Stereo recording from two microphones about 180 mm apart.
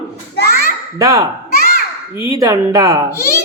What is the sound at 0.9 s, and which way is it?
Speech, 20° right (ahead or behind).